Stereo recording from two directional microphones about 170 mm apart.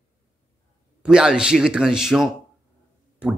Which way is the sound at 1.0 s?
5° right (ahead or behind).